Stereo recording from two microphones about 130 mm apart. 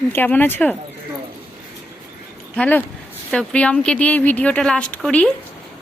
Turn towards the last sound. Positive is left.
turn(degrees=5)  # may be behind; listen again after turning